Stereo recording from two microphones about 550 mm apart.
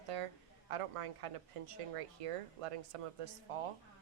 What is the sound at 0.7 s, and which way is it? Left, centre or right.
Speech, right.